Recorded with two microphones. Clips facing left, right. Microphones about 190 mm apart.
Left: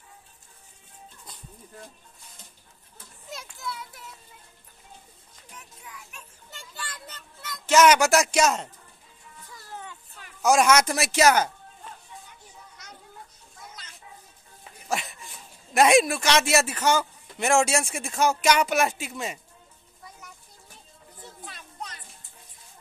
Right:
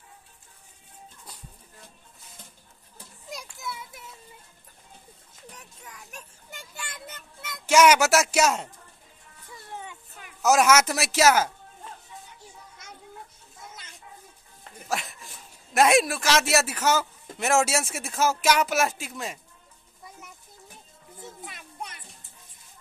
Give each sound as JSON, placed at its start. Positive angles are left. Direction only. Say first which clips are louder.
{"t": 5.6, "sound": "children playing", "louder": "even", "side_deg": -40}
{"t": 6.5, "sound": "child singing", "louder": "even", "side_deg": -15}
{"t": 7.6, "sound": "speech", "louder": "even", "side_deg": -10}
{"t": 9.5, "sound": "music", "louder": "right 2 dB", "side_deg": -25}
{"t": 9.8, "sound": "a sound", "louder": "even", "side_deg": -15}
{"t": 10.4, "sound": "speech", "louder": "even", "side_deg": -5}
{"t": 14.6, "sound": "a sound", "louder": "left 1 dB", "side_deg": 0}
{"t": 17.4, "sound": "speech", "louder": "left 1 dB", "side_deg": -5}
{"t": 21.2, "sound": "children playing", "louder": "right 2 dB", "side_deg": -15}